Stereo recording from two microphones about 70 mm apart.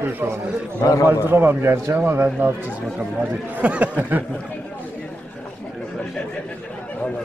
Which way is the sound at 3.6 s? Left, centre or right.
Right.